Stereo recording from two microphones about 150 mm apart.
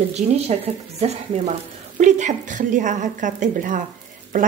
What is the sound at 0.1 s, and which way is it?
A woman's voice, 45° right (ahead or behind).